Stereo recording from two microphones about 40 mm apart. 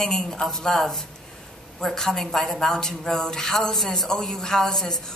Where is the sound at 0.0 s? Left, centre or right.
Centre.